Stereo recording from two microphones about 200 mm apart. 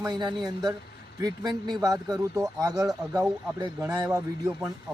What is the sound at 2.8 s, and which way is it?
Speech, 5° right (ahead or behind).